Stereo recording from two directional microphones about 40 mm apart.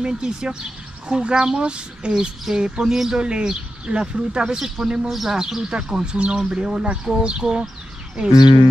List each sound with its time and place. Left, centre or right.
0.0 s speech: centre
2.1 s speech: centre
3.2 s speech: right
4.6 s speech: centre
5.4 s speech: centre